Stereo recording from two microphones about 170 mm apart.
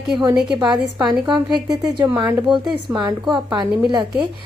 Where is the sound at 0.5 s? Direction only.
25° right (ahead or behind).